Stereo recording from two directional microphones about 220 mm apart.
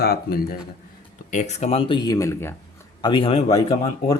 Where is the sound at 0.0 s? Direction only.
45° left (ahead or behind).